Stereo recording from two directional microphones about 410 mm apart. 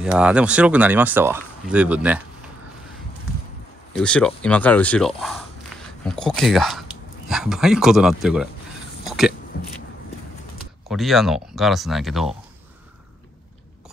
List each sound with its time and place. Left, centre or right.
0.0 s speech: centre
3.9 s speech: centre
5.7 s a sound: centre
6.0 s speech: centre
9.0 s a sound: centre
10.9 s speech: centre